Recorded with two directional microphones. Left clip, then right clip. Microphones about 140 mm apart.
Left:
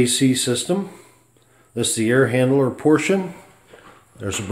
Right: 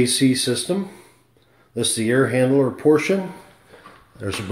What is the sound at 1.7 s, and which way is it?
A man's voice, 25° left (ahead or behind).